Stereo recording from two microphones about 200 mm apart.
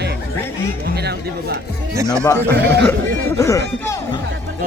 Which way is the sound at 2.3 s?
10° left (ahead or behind).